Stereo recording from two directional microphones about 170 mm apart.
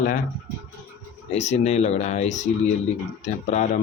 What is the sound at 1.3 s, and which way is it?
Speech, 40° left (ahead or behind).